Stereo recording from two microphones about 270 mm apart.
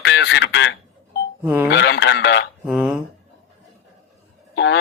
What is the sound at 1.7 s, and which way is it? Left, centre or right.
Speech, left.